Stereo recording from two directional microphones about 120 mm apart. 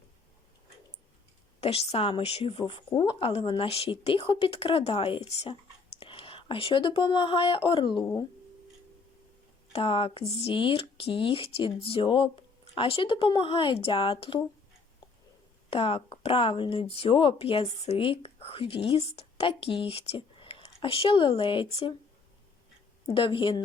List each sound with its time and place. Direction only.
1.6 s speech: 55° left (ahead or behind)
6.0 s speech: 50° left (ahead or behind)
9.7 s speech: 50° left (ahead or behind)
15.7 s speech: 55° left (ahead or behind)
23.0 s speech: 45° left (ahead or behind)